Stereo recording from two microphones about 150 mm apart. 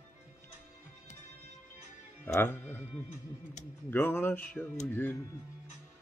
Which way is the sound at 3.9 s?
15° left (ahead or behind).